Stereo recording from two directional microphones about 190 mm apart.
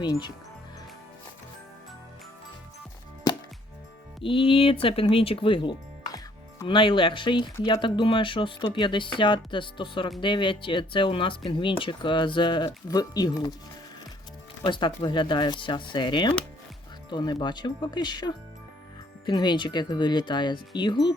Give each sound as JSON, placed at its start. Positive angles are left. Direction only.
{"t": 0.0, "sound": "speech", "side_deg": 25}
{"t": 4.2, "sound": "speech", "side_deg": 25}
{"t": 14.6, "sound": "speech", "side_deg": 25}